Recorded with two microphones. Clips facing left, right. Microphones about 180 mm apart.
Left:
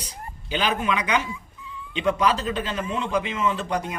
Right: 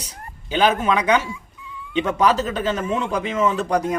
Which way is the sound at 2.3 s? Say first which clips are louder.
Right 4 dB; 40° right (ahead or behind).